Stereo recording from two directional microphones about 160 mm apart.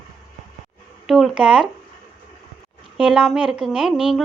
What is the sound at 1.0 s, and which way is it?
Speech, centre (ahead or behind).